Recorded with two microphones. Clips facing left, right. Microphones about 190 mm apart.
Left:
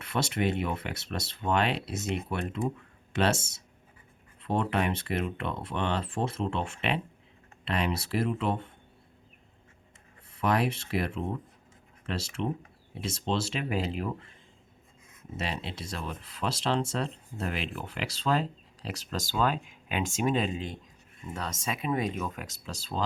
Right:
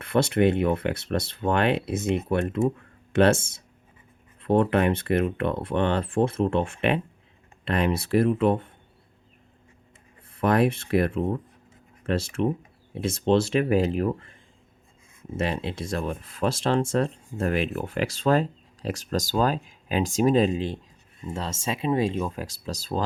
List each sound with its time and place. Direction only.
0.0 s speech: 55° right (ahead or behind)
10.3 s speech: 50° right (ahead or behind)
15.4 s speech: 50° right (ahead or behind)